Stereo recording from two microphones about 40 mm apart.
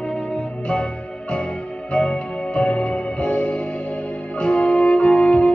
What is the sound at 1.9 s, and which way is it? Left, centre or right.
Music, left.